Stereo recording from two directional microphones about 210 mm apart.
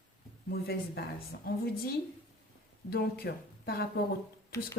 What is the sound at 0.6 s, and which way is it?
Speech, 50° left (ahead or behind).